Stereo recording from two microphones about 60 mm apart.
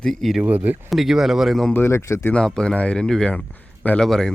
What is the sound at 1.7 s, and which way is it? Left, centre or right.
Speech, left.